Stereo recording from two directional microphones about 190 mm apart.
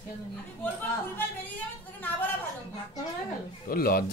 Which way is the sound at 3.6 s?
50° left (ahead or behind).